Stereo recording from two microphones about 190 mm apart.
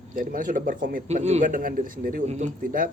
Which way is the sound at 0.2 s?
45° right (ahead or behind).